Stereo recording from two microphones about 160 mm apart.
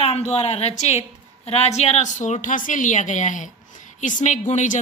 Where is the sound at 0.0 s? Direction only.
40° left (ahead or behind).